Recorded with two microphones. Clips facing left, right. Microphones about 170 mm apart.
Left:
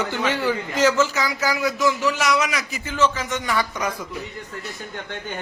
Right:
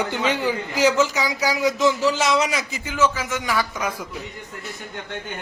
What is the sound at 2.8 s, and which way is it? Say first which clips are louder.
Speech: even; 10° right (ahead or behind).